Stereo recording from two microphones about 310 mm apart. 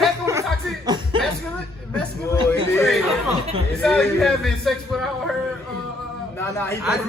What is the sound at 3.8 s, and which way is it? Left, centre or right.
A man's voice, centre.